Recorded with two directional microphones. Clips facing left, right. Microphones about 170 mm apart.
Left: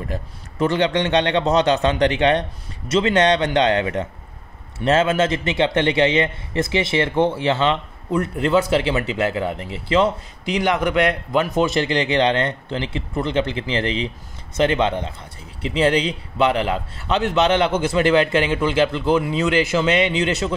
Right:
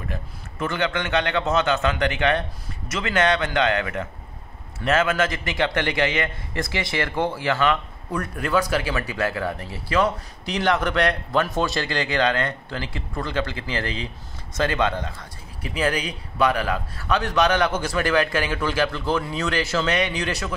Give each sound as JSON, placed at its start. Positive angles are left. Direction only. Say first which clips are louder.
{"t": 0.1, "sound": "a man's voice", "louder": "left 4 dB", "side_deg": 30}